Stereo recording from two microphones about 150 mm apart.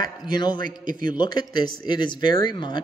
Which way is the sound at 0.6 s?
65° right (ahead or behind).